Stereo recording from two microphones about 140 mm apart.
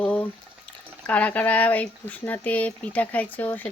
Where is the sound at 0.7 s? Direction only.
10° left (ahead or behind).